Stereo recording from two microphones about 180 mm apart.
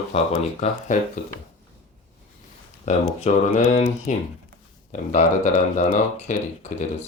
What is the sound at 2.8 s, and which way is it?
Speech, 40° left (ahead or behind).